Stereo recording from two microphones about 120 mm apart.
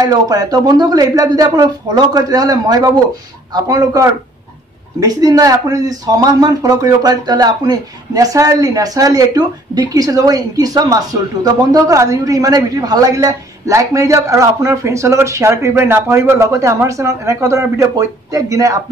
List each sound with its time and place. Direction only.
0.0 s speech: 30° right (ahead or behind)